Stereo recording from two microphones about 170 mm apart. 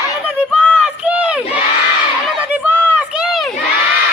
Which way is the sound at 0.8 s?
5° right (ahead or behind).